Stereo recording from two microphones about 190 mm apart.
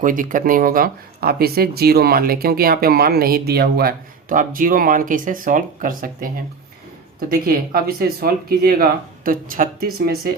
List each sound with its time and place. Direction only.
0.0 s speech: 45° right (ahead or behind)